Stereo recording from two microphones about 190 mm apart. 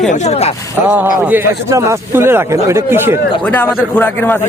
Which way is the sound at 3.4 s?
10° left (ahead or behind).